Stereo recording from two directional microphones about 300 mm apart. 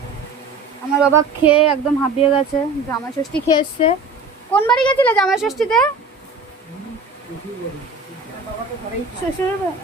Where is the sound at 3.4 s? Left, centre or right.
Centre.